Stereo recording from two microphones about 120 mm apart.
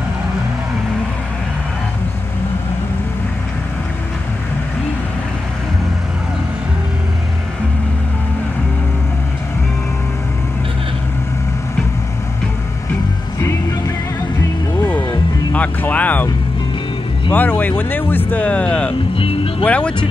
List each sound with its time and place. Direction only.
13.4 s music: 20° left (ahead or behind)
17.3 s speech: 15° left (ahead or behind)
19.1 s speech: 50° left (ahead or behind)
19.6 s speech: 10° left (ahead or behind)